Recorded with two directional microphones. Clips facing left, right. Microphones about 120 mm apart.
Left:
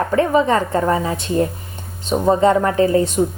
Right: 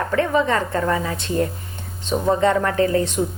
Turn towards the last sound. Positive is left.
turn(degrees=25)  # may be behind; listen again after turning